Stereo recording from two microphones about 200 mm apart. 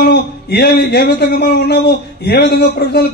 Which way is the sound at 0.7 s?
55° left (ahead or behind).